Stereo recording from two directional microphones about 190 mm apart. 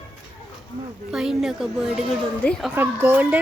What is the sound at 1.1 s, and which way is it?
Speech, centre (ahead or behind).